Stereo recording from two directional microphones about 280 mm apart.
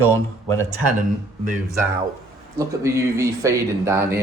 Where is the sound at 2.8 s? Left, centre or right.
Centre.